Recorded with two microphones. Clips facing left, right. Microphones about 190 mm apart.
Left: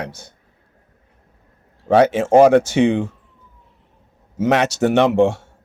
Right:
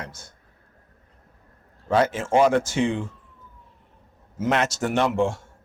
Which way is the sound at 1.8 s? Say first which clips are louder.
Left 7 dB; 65° left (ahead or behind).